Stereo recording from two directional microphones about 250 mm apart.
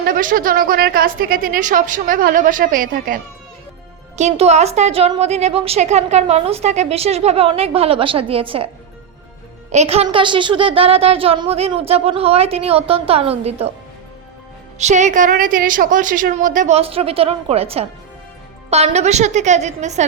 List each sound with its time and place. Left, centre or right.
0.0 s a woman's voice: right
4.2 s a woman's voice: right
9.7 s a woman's voice: right
14.8 s a woman's voice: right